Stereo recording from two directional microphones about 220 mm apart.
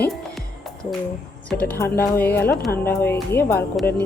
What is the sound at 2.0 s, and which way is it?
Music, 10° left (ahead or behind).